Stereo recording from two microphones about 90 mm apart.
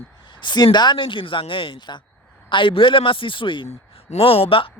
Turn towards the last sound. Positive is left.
turn(degrees=90)